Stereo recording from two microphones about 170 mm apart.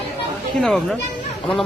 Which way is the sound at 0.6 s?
5° left (ahead or behind).